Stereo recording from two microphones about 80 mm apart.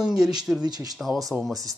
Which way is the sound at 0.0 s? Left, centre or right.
Centre.